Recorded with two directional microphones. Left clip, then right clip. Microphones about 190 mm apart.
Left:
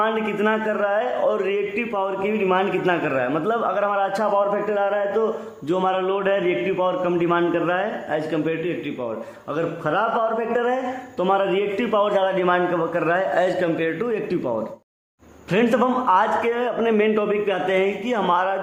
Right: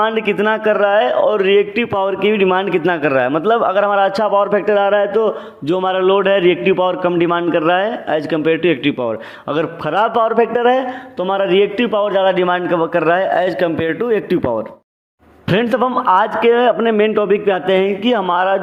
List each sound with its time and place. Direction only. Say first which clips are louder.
0.0 s a man's voice: right 6 dB; 35° right (ahead or behind)
11.2 s a man's voice: right 6 dB; 30° right (ahead or behind)